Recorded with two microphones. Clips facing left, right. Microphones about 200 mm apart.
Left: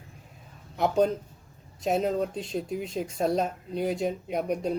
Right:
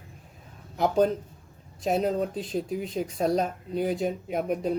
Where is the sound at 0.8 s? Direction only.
Centre (ahead or behind).